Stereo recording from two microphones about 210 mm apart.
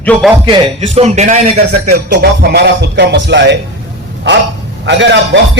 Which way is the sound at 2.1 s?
50° right (ahead or behind).